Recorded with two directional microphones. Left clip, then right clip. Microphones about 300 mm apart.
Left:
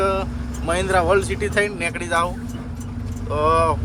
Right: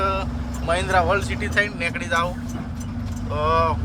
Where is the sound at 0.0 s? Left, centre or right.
Centre.